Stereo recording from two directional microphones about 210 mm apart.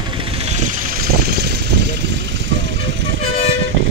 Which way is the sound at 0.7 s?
45° right (ahead or behind).